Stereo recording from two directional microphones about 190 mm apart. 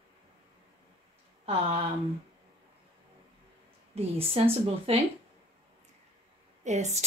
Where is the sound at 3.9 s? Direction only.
30° right (ahead or behind).